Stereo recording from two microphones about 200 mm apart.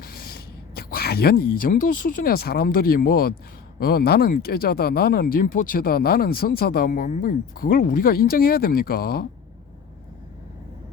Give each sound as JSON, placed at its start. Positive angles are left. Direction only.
{"t": 0.0, "sound": "speech", "side_deg": 50}